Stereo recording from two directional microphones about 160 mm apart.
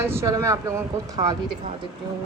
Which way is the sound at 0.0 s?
15° right (ahead or behind).